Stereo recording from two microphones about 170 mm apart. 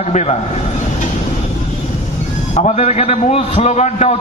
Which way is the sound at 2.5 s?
40° left (ahead or behind).